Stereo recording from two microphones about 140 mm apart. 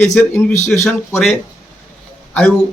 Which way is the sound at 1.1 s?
15° left (ahead or behind).